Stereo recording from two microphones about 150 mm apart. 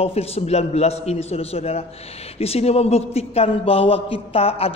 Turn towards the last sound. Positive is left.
turn(degrees=40)  # may be behind; listen again after turning